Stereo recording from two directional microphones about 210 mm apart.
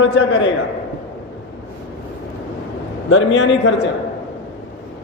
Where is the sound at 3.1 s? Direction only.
65° left (ahead or behind).